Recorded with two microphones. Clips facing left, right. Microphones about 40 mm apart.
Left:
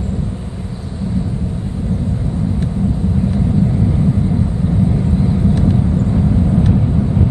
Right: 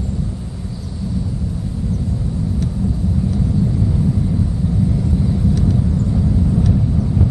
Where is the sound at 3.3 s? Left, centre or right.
Left.